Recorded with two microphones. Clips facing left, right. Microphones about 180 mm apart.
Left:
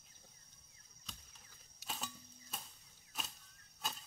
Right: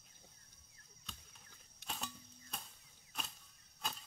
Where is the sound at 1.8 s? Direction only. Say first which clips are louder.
Even; centre (ahead or behind).